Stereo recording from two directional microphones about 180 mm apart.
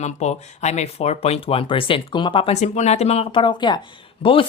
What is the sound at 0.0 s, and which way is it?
Speech, 40° left (ahead or behind).